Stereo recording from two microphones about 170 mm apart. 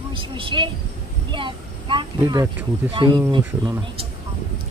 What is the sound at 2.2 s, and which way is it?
Speech, 15° right (ahead or behind).